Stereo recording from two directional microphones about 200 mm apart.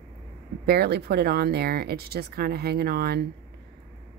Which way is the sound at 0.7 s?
50° right (ahead or behind).